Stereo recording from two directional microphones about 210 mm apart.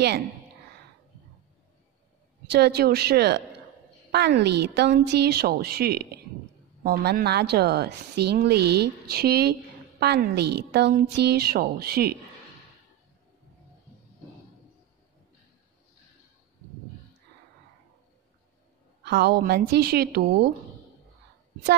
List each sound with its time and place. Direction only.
2.5 s a woman's voice: 50° right (ahead or behind)
19.0 s a woman's voice: 50° right (ahead or behind)